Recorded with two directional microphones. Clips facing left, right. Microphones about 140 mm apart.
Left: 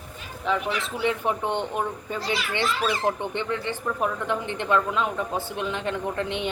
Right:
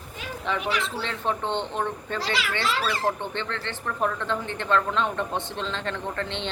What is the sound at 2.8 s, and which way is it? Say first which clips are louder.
Speech: left 2 dB; 20° left (ahead or behind).